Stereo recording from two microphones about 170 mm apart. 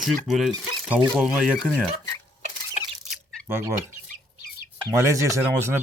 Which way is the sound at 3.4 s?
15° right (ahead or behind).